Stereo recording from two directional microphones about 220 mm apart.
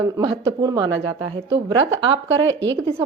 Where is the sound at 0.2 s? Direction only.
20° right (ahead or behind).